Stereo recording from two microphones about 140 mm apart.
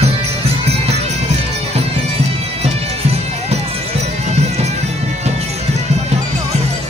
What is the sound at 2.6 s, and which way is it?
Music, 50° right (ahead or behind).